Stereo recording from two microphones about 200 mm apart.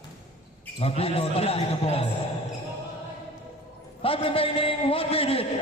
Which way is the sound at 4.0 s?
25° left (ahead or behind).